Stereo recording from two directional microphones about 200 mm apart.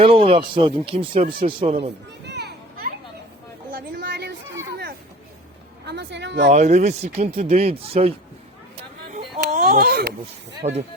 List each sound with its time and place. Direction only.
0.0 s speech: 25° right (ahead or behind)
2.2 s children playing: 55° right (ahead or behind)
3.8 s chatter: 55° right (ahead or behind)
5.8 s a sound: 60° right (ahead or behind)
6.5 s speech: 35° right (ahead or behind)
9.1 s a sound: 40° right (ahead or behind)
10.6 s speech: 30° right (ahead or behind)